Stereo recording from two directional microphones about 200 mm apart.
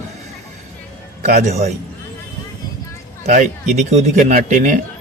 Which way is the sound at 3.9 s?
35° right (ahead or behind).